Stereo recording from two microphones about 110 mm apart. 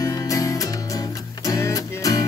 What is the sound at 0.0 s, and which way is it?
Music, 35° left (ahead or behind).